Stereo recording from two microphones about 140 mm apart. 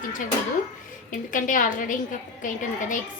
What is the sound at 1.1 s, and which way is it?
A woman's voice, 75° left (ahead or behind).